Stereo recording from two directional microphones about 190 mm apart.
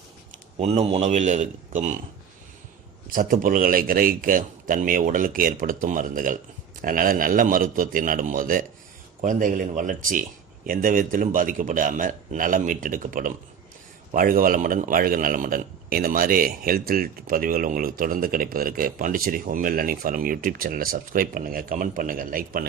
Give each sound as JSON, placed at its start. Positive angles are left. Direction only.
{"t": 0.6, "sound": "a man's voice", "side_deg": -35}
{"t": 3.1, "sound": "a man's voice", "side_deg": -45}